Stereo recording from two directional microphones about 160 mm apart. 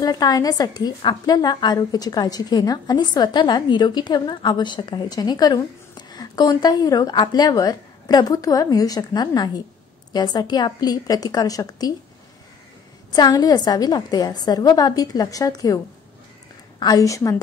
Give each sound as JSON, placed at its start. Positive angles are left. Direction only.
{"t": 0.0, "sound": "a woman's voice", "side_deg": 25}
{"t": 13.1, "sound": "a woman's voice", "side_deg": 25}
{"t": 16.8, "sound": "a woman's voice", "side_deg": 20}